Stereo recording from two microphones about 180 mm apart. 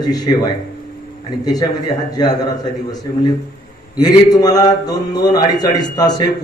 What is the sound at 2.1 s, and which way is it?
Speech, 20° left (ahead or behind).